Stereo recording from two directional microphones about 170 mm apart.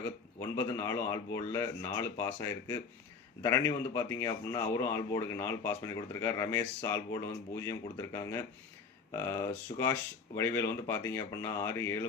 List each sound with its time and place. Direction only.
0.3 s speech: 15° left (ahead or behind)